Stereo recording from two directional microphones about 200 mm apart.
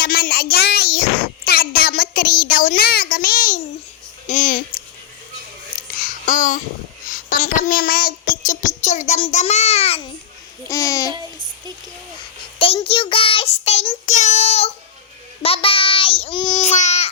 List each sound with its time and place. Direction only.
0.0 s child singing: 50° left (ahead or behind)
1.5 s a child's voice: 50° left (ahead or behind)
5.9 s a sound: 45° left (ahead or behind)
7.1 s a child's voice: 40° left (ahead or behind)
10.7 s babbling: 15° left (ahead or behind)
12.5 s child singing: 25° left (ahead or behind)
16.6 s baby cry: 35° left (ahead or behind)